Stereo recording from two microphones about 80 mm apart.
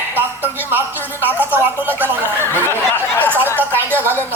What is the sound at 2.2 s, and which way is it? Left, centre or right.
Speech, left.